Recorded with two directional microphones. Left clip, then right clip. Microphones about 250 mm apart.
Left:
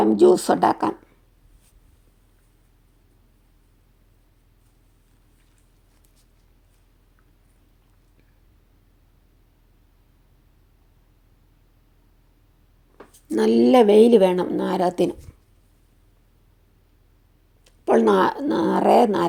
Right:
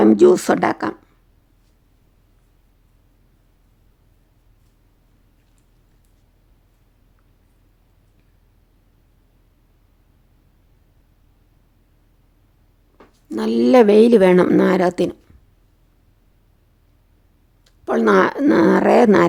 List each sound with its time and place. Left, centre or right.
0.1 s speech: right
0.3 s speech: centre
13.3 s speech: centre
13.6 s speech: centre
17.7 s a sound: centre
18.0 s speech: centre